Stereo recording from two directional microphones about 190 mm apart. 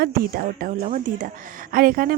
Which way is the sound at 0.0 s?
50° right (ahead or behind).